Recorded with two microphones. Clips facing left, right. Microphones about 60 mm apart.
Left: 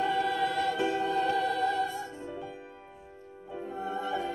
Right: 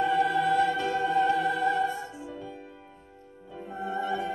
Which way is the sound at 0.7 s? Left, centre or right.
Centre.